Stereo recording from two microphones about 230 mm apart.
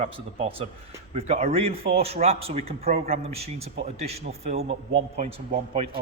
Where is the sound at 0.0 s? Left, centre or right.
Right.